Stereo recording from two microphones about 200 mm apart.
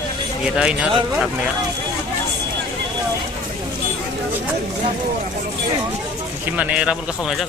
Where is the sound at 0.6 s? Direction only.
5° right (ahead or behind).